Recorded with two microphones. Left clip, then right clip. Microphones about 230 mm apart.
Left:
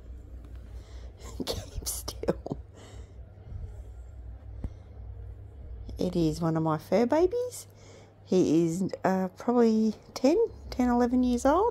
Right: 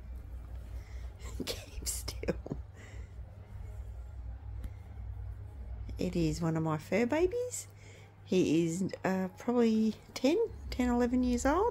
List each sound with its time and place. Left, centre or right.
1.2 s cough: centre
2.5 s a sound: centre
5.9 s a woman's voice: centre